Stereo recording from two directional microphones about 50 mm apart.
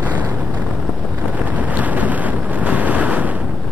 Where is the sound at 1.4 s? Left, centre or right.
Right.